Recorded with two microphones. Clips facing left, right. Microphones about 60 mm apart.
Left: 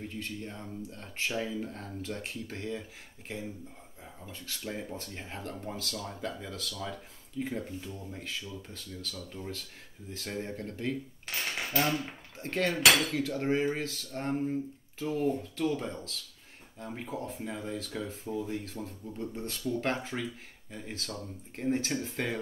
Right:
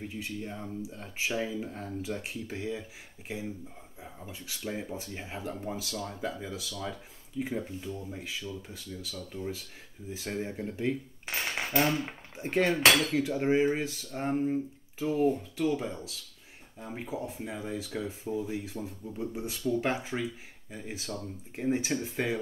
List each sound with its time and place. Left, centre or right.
0.1 s speech: centre
11.2 s a sound: right
12.4 s speech: centre